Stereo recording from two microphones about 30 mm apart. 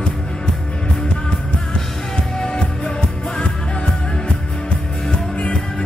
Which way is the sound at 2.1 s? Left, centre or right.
Left.